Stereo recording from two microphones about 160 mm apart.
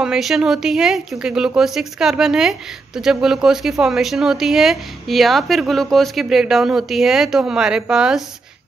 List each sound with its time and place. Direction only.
0.0 s speech: 5° right (ahead or behind)